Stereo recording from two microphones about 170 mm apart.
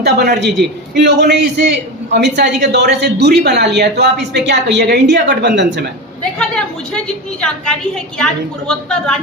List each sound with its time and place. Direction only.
0.0 s a woman's voice: 75° right (ahead or behind); by 5.6 s 90° right
7.4 s a woman's voice: 5° left (ahead or behind)